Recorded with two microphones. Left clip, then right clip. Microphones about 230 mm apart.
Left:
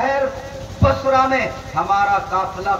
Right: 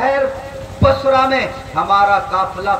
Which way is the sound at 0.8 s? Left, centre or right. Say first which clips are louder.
Right 3 dB; right.